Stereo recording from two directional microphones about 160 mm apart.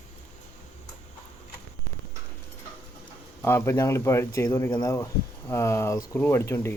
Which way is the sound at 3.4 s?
15° left (ahead or behind).